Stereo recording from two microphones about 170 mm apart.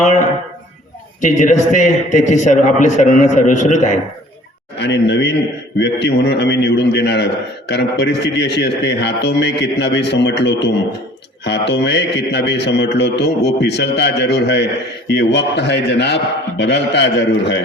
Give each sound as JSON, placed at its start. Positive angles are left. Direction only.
{"t": 1.2, "sound": "a man's voice", "side_deg": 45}
{"t": 4.8, "sound": "a man's voice", "side_deg": 90}